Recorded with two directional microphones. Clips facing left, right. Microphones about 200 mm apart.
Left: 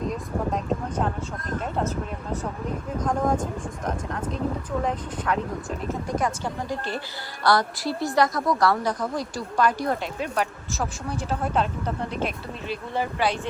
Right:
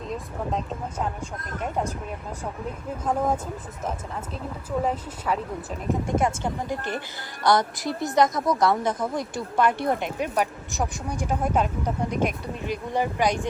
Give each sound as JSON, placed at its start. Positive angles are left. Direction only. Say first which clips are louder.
{"t": 1.6, "sound": "speech", "louder": "right 1 dB", "side_deg": -15}
{"t": 5.9, "sound": "a woman's voice", "louder": "right 4 dB", "side_deg": -25}